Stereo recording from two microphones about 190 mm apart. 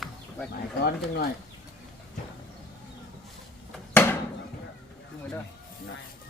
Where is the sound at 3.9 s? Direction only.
10° left (ahead or behind).